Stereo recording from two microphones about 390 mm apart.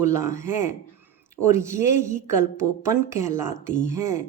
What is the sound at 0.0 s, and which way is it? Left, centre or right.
A woman's voice, centre.